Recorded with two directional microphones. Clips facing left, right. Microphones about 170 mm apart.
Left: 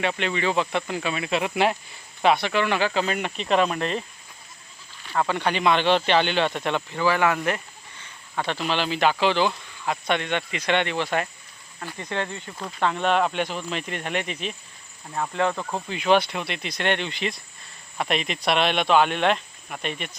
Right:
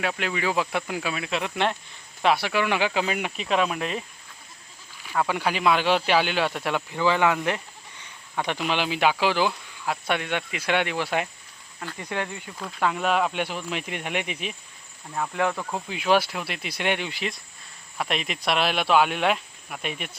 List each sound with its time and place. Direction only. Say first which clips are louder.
0.0 s speech: left 2 dB; 5° right (ahead or behind)
2.2 s speech: left 2 dB; 5° right (ahead or behind)
5.0 s speech: left 1 dB; 5° right (ahead or behind)
7.0 s speech: even; 15° right (ahead or behind)
12.5 s speech: left 1 dB; centre (ahead or behind)
15.7 s speech: left 2 dB; 5° right (ahead or behind)